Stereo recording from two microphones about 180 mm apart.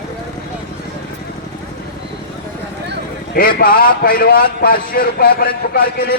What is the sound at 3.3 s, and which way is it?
A man's voice, 55° left (ahead or behind).